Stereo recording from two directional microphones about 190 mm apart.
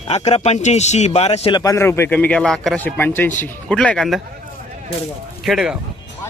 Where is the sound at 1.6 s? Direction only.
15° left (ahead or behind).